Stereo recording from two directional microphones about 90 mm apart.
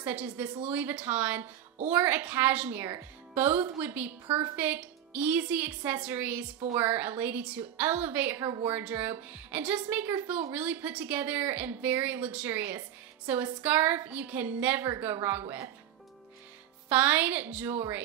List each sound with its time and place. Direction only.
0.0 s a woman's voice: 15° right (ahead or behind); by 15.7 s 30° right (ahead or behind)
16.9 s a woman's voice: 20° right (ahead or behind)